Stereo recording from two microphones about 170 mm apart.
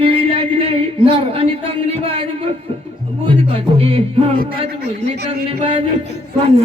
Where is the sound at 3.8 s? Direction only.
35° right (ahead or behind).